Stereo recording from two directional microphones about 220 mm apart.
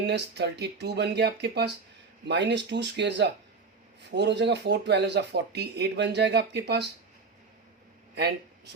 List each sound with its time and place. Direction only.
0.0 s speech: 50° right (ahead or behind)
8.1 s speech: 50° right (ahead or behind)